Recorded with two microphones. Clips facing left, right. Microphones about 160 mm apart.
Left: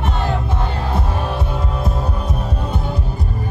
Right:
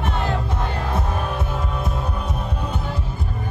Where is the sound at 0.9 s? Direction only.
30° left (ahead or behind).